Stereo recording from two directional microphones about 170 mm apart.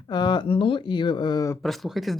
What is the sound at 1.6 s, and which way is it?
Speech, centre (ahead or behind).